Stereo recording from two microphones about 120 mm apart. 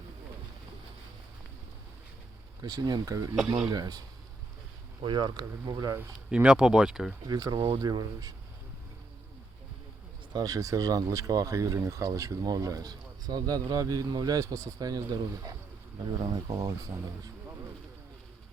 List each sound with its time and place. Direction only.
2.6 s speech: 35° right (ahead or behind)
3.3 s speech: centre (ahead or behind)
3.7 s speech: 30° right (ahead or behind)
5.0 s speech: 40° right (ahead or behind)
6.1 s speech: 5° right (ahead or behind)
7.3 s speech: 35° right (ahead or behind)
10.3 s speech: 30° right (ahead or behind)